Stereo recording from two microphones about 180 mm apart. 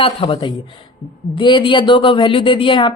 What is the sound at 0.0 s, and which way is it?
A woman's voice, 30° left (ahead or behind).